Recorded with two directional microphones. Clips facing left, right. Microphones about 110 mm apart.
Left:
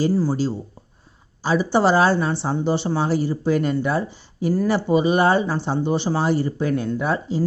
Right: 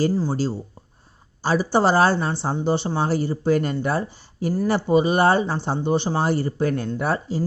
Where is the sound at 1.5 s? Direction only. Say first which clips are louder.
Left 1 dB; 35° right (ahead or behind).